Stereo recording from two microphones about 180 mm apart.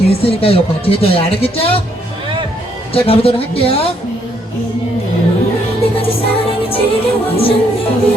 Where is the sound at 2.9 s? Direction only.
30° left (ahead or behind).